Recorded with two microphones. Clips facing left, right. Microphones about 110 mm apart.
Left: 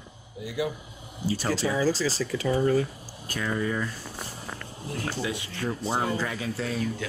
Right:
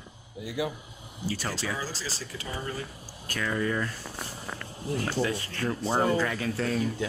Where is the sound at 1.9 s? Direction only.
85° left.